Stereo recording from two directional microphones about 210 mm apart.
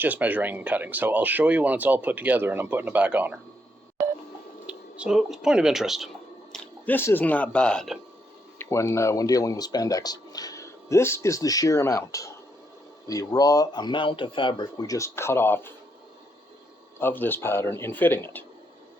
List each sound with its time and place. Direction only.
0.0 s speech: 10° right (ahead or behind)
4.6 s speech: 5° right (ahead or behind)
6.5 s speech: 10° left (ahead or behind)
17.0 s speech: 10° left (ahead or behind)